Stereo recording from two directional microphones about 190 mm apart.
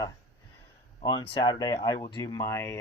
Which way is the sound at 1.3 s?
25° left (ahead or behind).